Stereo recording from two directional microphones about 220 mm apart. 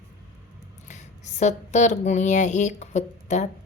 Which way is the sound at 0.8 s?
30° left (ahead or behind).